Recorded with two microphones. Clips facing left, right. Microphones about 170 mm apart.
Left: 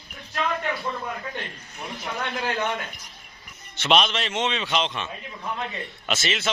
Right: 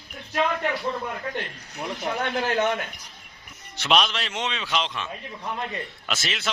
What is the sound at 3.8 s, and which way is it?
A man's voice, centre (ahead or behind).